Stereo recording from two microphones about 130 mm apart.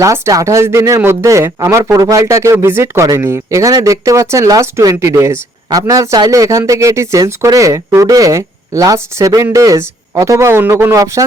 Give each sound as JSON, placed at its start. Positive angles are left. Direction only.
{"t": 0.0, "sound": "speech", "side_deg": -25}